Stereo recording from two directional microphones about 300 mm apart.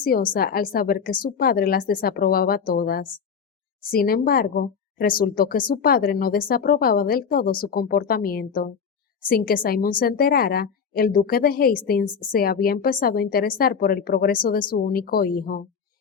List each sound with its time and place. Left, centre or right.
0.0 s speech: left